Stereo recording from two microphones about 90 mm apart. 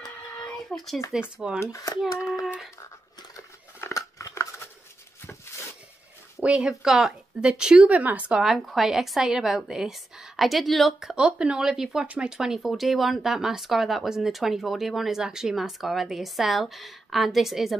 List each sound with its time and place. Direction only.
0.7 s speech: 15° left (ahead or behind)
1.1 s speech: 10° right (ahead or behind)
1.6 s a child's voice: 35° left (ahead or behind)
3.3 s scissors: 35° left (ahead or behind)
6.4 s speech: 10° right (ahead or behind)